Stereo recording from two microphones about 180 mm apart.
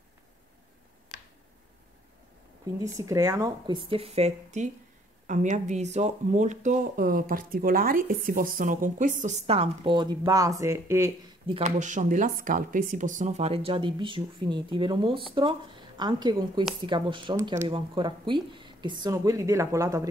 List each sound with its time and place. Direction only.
2.8 s speech: 20° right (ahead or behind)
11.4 s speech: 30° right (ahead or behind)
11.8 s speech: 45° right (ahead or behind); by 17.4 s 25° right (ahead or behind)
17.4 s speech: 15° right (ahead or behind)
17.6 s speech: 30° right (ahead or behind)